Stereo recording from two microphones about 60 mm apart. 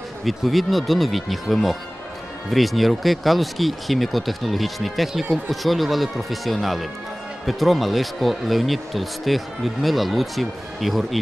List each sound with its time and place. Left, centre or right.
0.2 s speech: centre